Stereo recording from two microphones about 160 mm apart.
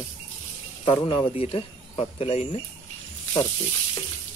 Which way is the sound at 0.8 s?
30° left (ahead or behind).